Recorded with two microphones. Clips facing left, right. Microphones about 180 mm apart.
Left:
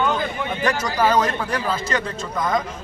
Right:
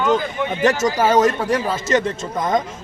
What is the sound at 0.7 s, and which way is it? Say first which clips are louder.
Speech: right 6 dB; 45° right (ahead or behind).